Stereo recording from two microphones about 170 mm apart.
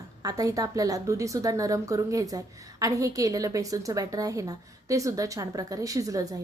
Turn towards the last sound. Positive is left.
turn(degrees=-20)  # may be behind; listen again after turning